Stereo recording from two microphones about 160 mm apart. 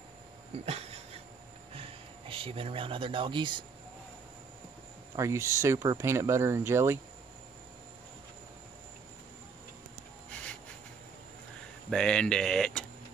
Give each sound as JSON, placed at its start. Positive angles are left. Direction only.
{"t": 0.7, "sound": "dog", "side_deg": -40}
{"t": 1.7, "sound": "speech", "side_deg": -35}
{"t": 5.1, "sound": "speech", "side_deg": -20}
{"t": 11.9, "sound": "speech", "side_deg": 5}